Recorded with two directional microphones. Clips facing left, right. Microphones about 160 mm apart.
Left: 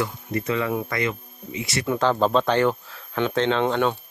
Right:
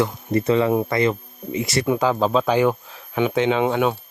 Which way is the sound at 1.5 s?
40° right (ahead or behind).